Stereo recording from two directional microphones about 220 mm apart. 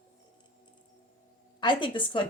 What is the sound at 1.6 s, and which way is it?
Speech, 20° left (ahead or behind).